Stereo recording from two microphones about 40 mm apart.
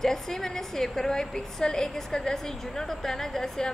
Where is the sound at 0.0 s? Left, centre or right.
Centre.